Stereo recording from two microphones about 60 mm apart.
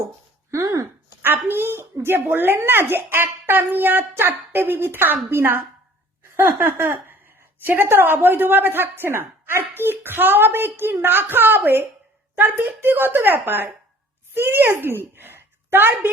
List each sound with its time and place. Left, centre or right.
0.5 s speech: right
1.2 s a woman's voice: right
6.3 s a sound: right
7.6 s a woman's voice: right